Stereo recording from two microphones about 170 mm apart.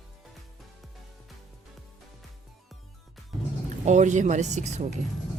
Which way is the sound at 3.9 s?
45° right (ahead or behind).